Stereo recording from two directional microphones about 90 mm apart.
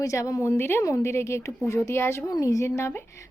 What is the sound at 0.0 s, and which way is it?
Speech, 35° left (ahead or behind).